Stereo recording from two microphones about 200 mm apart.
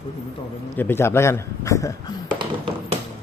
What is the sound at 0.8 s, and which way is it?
Speech, 10° left (ahead or behind).